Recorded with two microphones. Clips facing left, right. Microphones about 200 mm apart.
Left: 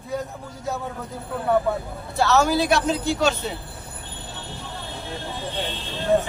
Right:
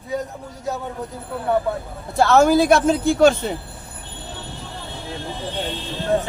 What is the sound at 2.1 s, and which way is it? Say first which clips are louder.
A man's voice: right 5 dB; 50° right (ahead or behind).